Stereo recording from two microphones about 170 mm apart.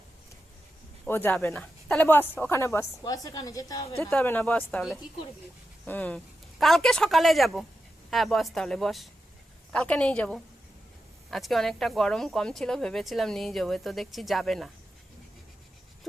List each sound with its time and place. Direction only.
1.0 s a woman's voice: 10° left (ahead or behind)
4.1 s speech: 10° left (ahead or behind)
5.8 s speech: 10° left (ahead or behind)